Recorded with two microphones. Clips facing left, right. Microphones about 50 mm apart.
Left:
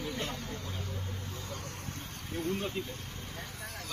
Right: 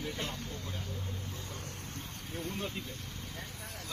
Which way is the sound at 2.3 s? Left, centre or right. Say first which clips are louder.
Left 5 dB; left.